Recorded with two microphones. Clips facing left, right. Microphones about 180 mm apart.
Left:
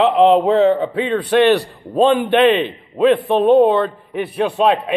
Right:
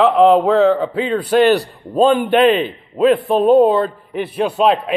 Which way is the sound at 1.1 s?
35° right (ahead or behind).